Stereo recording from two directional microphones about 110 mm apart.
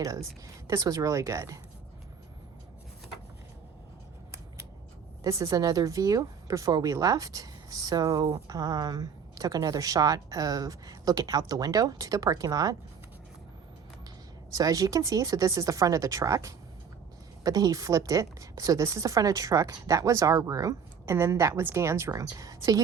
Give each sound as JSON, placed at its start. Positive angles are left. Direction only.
{"t": 0.4, "sound": "a woman's voice", "side_deg": -30}
{"t": 5.2, "sound": "a woman's voice", "side_deg": -30}
{"t": 14.5, "sound": "a woman's voice", "side_deg": -35}